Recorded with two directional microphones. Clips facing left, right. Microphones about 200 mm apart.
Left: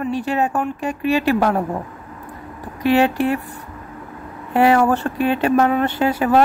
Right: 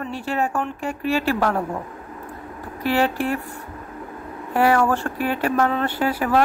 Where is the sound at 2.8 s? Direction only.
20° left (ahead or behind).